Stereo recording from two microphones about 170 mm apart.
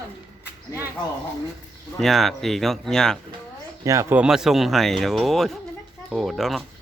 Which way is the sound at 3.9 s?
15° right (ahead or behind).